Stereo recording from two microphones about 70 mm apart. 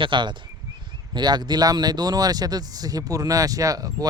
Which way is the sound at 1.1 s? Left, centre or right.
Right.